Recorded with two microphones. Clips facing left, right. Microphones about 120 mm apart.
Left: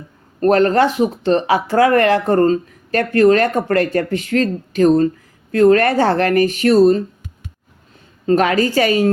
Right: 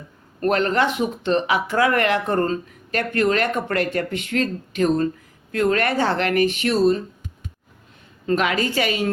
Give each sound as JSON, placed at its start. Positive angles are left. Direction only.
{"t": 0.3, "sound": "speech", "side_deg": 40}
{"t": 8.3, "sound": "speech", "side_deg": 40}